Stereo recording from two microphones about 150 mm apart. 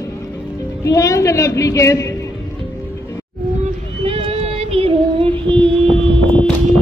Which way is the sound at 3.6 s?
35° right (ahead or behind).